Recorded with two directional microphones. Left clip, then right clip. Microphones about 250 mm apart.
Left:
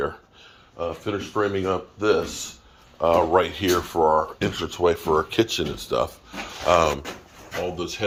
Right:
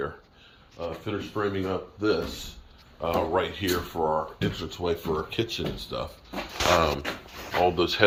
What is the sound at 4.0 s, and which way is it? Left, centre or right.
Speech, left.